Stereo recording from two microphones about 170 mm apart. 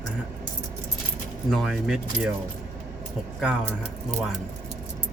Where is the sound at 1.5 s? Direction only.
Centre (ahead or behind).